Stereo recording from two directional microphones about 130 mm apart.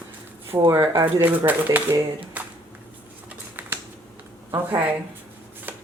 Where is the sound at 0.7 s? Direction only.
25° right (ahead or behind).